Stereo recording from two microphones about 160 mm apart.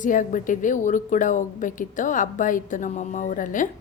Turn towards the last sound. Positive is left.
turn(degrees=55)  # may be behind; listen again after turning